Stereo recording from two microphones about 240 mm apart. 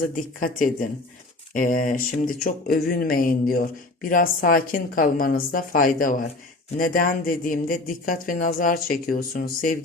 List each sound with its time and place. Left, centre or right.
0.2 s speech: left